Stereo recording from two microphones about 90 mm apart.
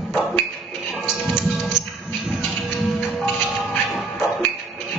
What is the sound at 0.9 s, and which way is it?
Music, centre (ahead or behind).